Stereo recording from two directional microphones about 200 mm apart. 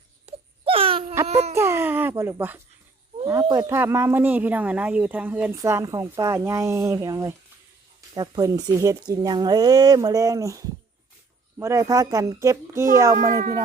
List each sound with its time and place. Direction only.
0.3 s wail: 30° right (ahead or behind)
1.3 s baby cry: 30° right (ahead or behind)
1.5 s a sound: 10° right (ahead or behind)
3.5 s a woman's voice: 15° right (ahead or behind)